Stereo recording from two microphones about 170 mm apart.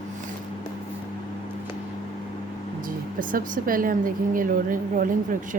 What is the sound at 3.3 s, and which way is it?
Speech, 55° right (ahead or behind).